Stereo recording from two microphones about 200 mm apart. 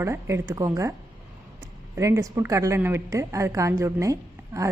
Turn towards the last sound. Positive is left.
turn(degrees=-15)  # may be behind; listen again after turning